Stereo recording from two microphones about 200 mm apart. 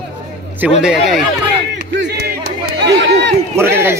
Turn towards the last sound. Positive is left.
turn(degrees=-10)  # may be behind; listen again after turning